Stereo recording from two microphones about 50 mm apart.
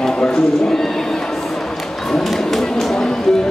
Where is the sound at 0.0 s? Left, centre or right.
Centre.